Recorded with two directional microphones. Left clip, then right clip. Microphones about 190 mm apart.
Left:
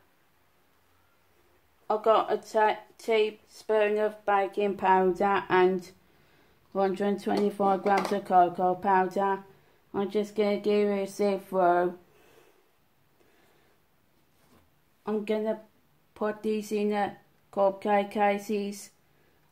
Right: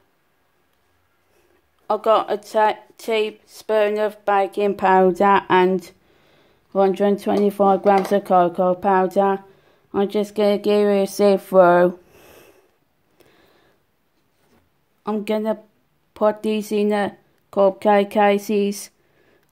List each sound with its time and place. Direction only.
1.9 s speech: 45° right (ahead or behind)
15.0 s speech: 50° right (ahead or behind)